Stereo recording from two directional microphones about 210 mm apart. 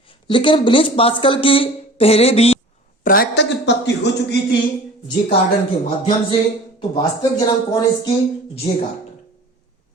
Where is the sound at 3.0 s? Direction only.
40° left (ahead or behind).